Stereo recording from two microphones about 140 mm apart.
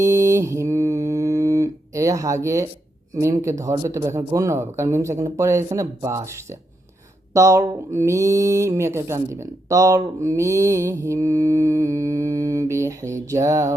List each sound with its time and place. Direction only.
0.0 s music: 20° right (ahead or behind)
3.2 s speech: 20° right (ahead or behind)